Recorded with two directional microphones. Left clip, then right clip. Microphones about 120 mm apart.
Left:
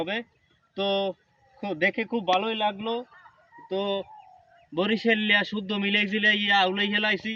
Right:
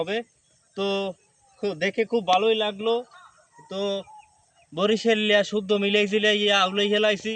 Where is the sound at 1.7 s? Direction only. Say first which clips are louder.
Right 1 dB; 55° right (ahead or behind).